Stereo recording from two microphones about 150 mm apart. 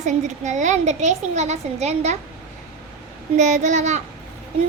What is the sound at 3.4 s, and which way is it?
Speech, 55° right (ahead or behind).